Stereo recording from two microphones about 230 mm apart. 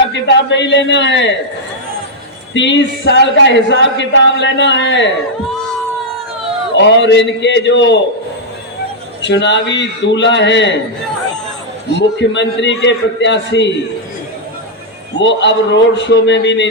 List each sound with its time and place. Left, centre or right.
0.1 s speech: left
2.5 s speech: left
6.7 s speech: left
9.2 s speech: left
11.9 s speech: left
15.2 s speech: left